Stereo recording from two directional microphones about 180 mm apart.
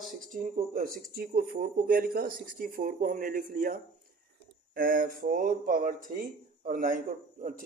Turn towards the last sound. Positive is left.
turn(degrees=-50)  # may be behind; listen again after turning